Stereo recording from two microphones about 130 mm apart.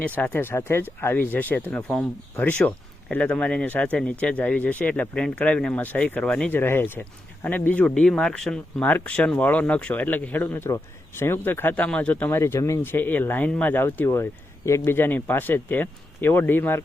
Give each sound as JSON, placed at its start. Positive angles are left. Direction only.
{"t": 0.0, "sound": "speech", "side_deg": 15}